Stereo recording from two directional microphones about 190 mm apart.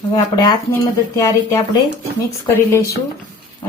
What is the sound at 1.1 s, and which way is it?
Speech, 15° left (ahead or behind).